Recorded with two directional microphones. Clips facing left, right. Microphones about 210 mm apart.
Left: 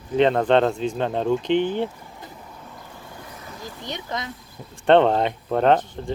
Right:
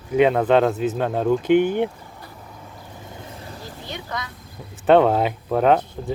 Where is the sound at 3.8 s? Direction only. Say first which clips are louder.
Left 1 dB; 20° left (ahead or behind).